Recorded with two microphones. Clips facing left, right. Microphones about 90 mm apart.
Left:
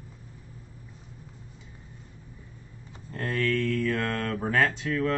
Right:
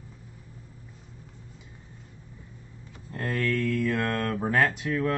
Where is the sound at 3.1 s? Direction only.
5° right (ahead or behind).